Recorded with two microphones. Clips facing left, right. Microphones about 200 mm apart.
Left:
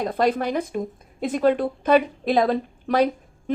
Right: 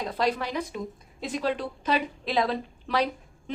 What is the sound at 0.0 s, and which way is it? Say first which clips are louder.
A woman's voice: left 6 dB; 55° left (ahead or behind).